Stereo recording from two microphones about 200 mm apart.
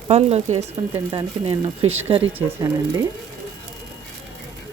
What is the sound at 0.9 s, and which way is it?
Speech, 20° right (ahead or behind).